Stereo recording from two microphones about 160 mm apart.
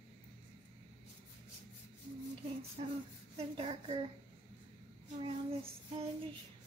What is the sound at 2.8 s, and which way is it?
A woman's voice, 35° right (ahead or behind).